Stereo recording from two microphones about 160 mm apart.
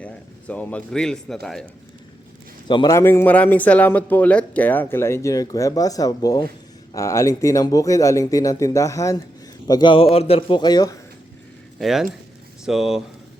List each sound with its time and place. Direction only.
0.0 s speech: 10° left (ahead or behind)
2.6 s speech: 25° left (ahead or behind)
11.8 s speech: centre (ahead or behind)